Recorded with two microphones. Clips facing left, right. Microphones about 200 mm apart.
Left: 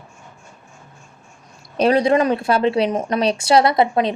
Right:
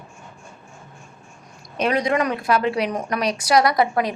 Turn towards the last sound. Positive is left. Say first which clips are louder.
# left 3 dB
turn(degrees=25)  # may be behind; listen again after turning